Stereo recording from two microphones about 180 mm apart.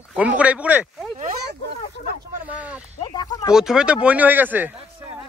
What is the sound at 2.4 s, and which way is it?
Speech, 10° right (ahead or behind).